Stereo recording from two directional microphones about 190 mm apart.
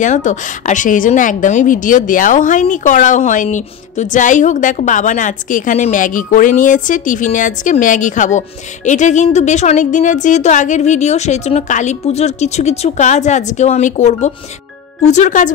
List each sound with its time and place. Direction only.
0.0 s a woman's voice: 40° left (ahead or behind)